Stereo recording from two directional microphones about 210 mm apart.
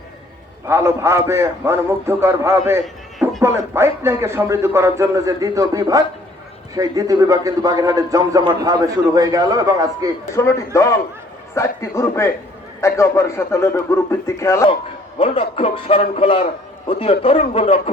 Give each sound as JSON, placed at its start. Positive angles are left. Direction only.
{"t": 0.7, "sound": "a man's voice", "side_deg": -15}
{"t": 10.3, "sound": "a man's voice", "side_deg": 15}
{"t": 15.2, "sound": "a man's voice", "side_deg": 25}